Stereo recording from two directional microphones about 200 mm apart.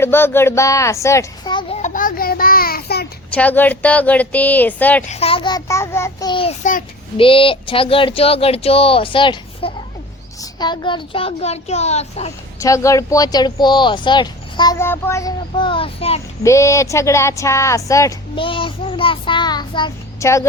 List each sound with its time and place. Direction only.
0.0 s speech: 10° left (ahead or behind)
1.7 s a sound: 40° left (ahead or behind)
3.2 s speech: 5° left (ahead or behind)
5.0 s speech: 30° left (ahead or behind)
7.2 s speech: 25° left (ahead or behind)
12.5 s speech: 15° left (ahead or behind)
16.4 s speech: 15° left (ahead or behind)
18.4 s speech: 25° left (ahead or behind)